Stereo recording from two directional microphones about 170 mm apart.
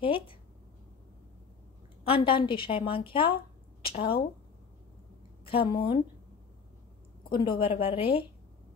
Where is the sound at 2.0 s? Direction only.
30° left (ahead or behind).